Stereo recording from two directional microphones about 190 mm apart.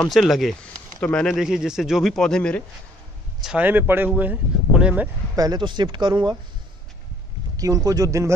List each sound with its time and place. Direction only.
0.0 s speech: centre (ahead or behind)
3.4 s speech: 10° right (ahead or behind)
5.3 s speech: 20° right (ahead or behind)
7.5 s speech: 20° right (ahead or behind)